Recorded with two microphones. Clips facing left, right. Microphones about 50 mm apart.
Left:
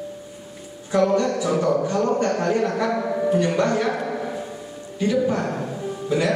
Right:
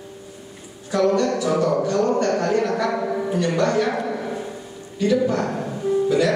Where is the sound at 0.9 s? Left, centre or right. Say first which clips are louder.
Even; left.